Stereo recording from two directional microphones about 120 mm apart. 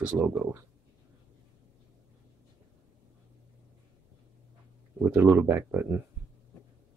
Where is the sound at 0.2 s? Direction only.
20° right (ahead or behind).